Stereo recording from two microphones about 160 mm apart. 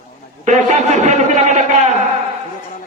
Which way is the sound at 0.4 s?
45° right (ahead or behind).